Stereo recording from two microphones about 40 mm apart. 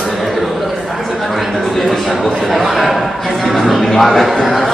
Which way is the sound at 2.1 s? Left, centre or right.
Centre.